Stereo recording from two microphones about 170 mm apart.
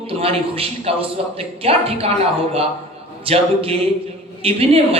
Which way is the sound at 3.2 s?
35° right (ahead or behind).